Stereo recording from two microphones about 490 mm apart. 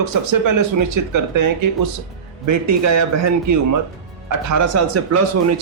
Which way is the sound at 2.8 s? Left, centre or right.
Right.